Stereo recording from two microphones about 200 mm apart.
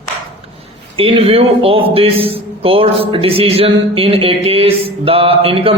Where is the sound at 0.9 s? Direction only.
30° right (ahead or behind).